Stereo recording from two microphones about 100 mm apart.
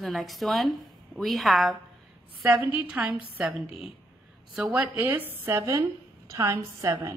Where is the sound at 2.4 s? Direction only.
15° right (ahead or behind).